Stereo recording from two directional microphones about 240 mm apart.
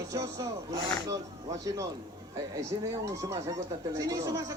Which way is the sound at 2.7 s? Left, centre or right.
Centre.